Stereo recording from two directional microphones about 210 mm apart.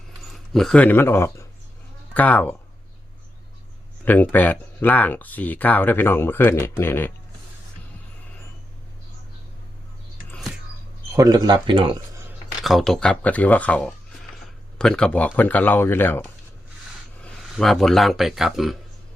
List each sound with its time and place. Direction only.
0.5 s speech: 5° left (ahead or behind)
4.0 s speech: 10° left (ahead or behind)
11.1 s speech: 15° right (ahead or behind)
12.6 s speech: centre (ahead or behind)